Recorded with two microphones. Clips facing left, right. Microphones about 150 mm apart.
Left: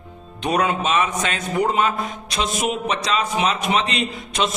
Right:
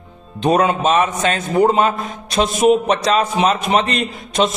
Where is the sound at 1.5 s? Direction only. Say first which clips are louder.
Right 5 dB; 35° right (ahead or behind).